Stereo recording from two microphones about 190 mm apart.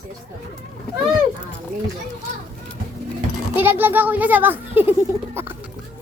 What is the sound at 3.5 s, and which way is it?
A child's voice, 10° right (ahead or behind).